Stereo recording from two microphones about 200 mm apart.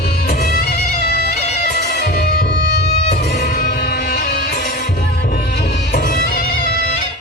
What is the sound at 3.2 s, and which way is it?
Music, 55° left (ahead or behind).